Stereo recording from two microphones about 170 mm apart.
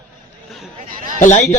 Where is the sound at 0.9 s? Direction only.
50° right (ahead or behind).